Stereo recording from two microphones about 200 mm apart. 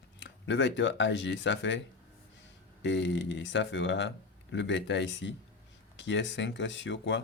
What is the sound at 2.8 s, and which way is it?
Speech, 65° left (ahead or behind).